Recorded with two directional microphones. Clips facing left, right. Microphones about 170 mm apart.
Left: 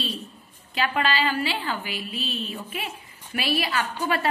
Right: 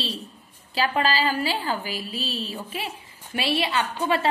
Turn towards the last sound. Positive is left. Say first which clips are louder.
# right 2 dB
turn(degrees=-25)  # may be behind; listen again after turning